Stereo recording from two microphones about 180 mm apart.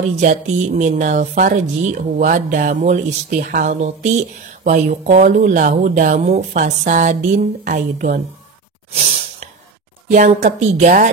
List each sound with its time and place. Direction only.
0.1 s speech: 45° right (ahead or behind)
8.9 s breathing: 40° right (ahead or behind)
10.1 s speech: 45° right (ahead or behind)